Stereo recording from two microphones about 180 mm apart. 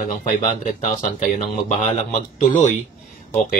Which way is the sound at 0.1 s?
45° left (ahead or behind).